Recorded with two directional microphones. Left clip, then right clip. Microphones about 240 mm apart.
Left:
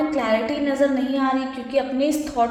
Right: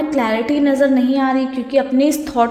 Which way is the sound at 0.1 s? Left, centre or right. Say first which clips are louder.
Right 4 dB; right.